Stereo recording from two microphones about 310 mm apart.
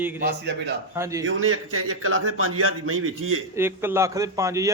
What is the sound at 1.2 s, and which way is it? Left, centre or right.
A man's voice, right.